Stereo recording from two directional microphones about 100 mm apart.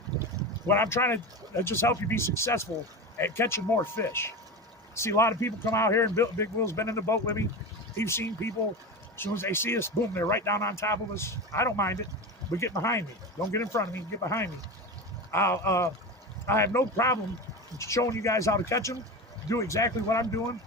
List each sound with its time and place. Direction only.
0.7 s speech: 25° left (ahead or behind)